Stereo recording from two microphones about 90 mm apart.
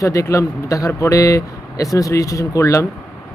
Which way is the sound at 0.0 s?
35° left (ahead or behind).